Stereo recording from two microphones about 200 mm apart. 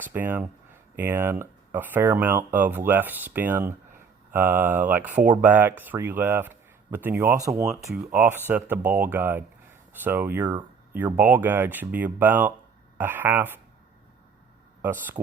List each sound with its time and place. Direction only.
0.0 s speech: 10° right (ahead or behind)
5.2 s speech: 40° right (ahead or behind)
5.5 s speech: 10° right (ahead or behind)
14.8 s speech: 10° right (ahead or behind)